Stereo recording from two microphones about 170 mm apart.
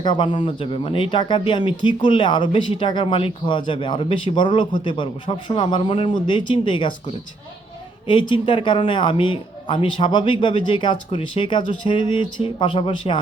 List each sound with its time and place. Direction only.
0.0 s a man's voice: 30° left (ahead or behind)
8.0 s a man's voice: 30° left (ahead or behind)